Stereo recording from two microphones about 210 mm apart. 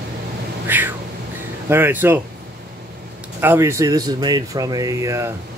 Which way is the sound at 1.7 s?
10° right (ahead or behind).